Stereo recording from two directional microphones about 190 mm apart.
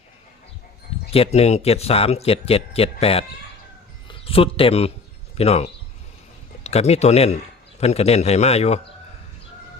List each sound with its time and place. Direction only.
1.1 s speech: 30° left (ahead or behind)